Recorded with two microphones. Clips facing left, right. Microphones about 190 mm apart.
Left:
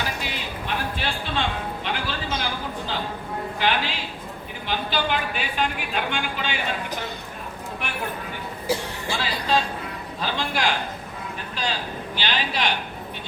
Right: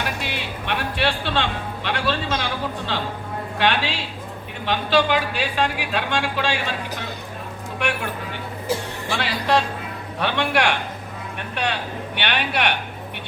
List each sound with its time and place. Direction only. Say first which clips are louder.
0.2 s speech: right 2 dB; 70° right (ahead or behind)
7.8 s speech: right 6 dB; 75° right (ahead or behind)